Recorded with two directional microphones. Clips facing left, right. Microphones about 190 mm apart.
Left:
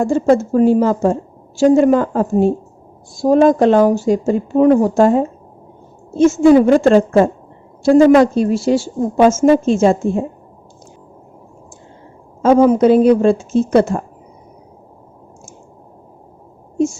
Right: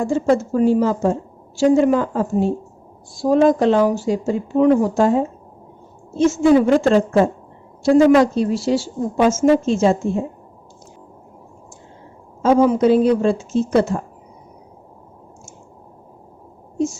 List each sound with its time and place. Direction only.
0.0 s a woman's voice: 45° left (ahead or behind)
12.4 s a woman's voice: 50° left (ahead or behind)